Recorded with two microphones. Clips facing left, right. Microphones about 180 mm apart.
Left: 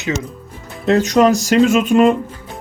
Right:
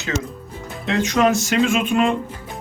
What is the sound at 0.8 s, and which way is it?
Speech, 40° left (ahead or behind).